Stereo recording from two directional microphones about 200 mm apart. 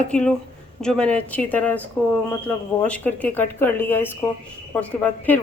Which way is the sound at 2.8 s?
5° left (ahead or behind).